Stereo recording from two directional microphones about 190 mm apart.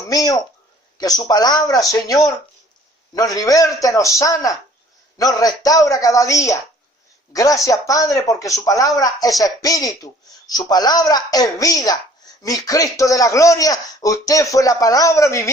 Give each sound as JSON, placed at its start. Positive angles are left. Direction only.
{"t": 0.1, "sound": "a man's voice", "side_deg": 20}